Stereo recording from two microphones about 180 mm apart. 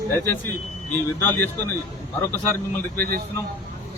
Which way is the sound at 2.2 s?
10° left (ahead or behind).